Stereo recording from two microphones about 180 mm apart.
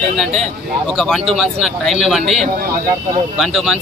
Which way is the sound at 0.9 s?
5° left (ahead or behind).